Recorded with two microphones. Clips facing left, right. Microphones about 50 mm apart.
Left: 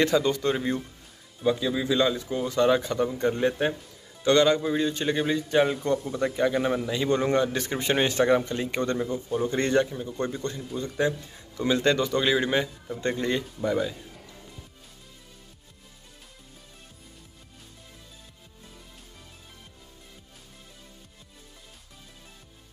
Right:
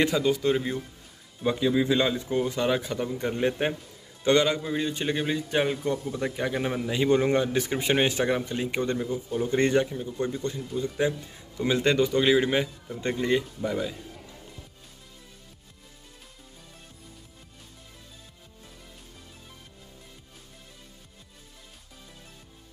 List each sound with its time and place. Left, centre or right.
0.0 s speech: centre
1.4 s a man's voice: centre
4.6 s speech: centre